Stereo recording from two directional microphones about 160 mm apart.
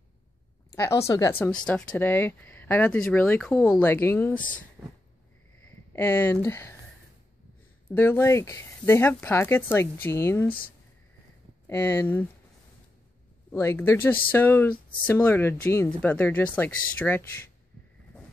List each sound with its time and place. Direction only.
0.7 s speech: 15° left (ahead or behind)
1.7 s speech: 5° left (ahead or behind)
4.8 s a sound: 15° right (ahead or behind)
5.7 s a sound: 10° left (ahead or behind)
6.4 s speech: 15° left (ahead or behind)
7.9 s speech: 15° left (ahead or behind)
11.6 s speech: 15° left (ahead or behind)
13.5 s speech: 15° left (ahead or behind)